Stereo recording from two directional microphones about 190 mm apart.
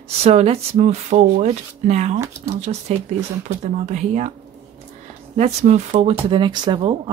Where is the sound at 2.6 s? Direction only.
35° right (ahead or behind).